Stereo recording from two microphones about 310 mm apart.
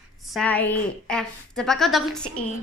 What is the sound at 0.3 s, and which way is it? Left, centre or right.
A woman's voice, centre.